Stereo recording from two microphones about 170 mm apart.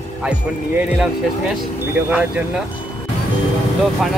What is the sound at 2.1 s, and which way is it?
Speech, 10° right (ahead or behind).